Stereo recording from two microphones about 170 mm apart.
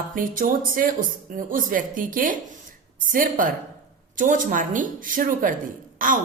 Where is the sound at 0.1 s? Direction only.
55° right (ahead or behind).